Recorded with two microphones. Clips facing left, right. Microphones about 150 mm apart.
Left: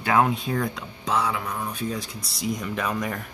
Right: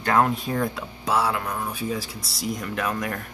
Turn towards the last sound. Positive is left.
turn(degrees=0)  # may be behind; listen again after turning